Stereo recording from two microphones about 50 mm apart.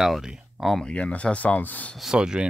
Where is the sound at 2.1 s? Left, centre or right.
Centre.